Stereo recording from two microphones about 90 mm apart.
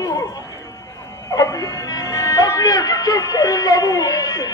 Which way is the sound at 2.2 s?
40° left (ahead or behind).